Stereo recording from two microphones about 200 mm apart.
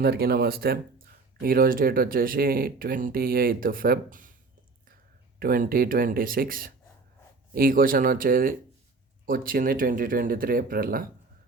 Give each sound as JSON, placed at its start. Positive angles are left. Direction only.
{"t": 0.0, "sound": "speech", "side_deg": -50}
{"t": 5.4, "sound": "speech", "side_deg": -45}